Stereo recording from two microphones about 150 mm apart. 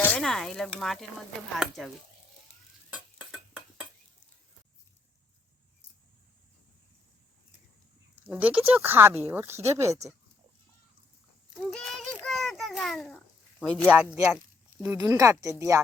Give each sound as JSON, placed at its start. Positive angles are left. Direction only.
{"t": 0.2, "sound": "speech", "side_deg": 0}
{"t": 2.9, "sound": "stir", "side_deg": -5}
{"t": 8.1, "sound": "speech", "side_deg": -10}
{"t": 11.7, "sound": "a child's voice", "side_deg": 5}
{"t": 13.9, "sound": "speech", "side_deg": -10}